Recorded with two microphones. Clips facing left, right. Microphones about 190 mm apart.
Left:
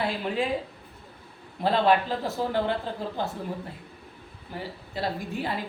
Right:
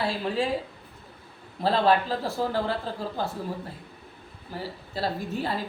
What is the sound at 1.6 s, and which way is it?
A woman's voice, 15° left (ahead or behind).